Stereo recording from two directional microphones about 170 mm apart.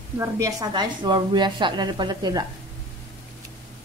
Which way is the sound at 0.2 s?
20° right (ahead or behind).